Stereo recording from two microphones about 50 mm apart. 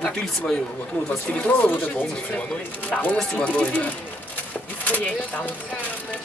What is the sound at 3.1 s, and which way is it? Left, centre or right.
Speech, left.